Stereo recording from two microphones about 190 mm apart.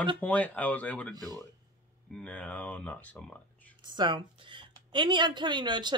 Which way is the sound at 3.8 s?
25° right (ahead or behind).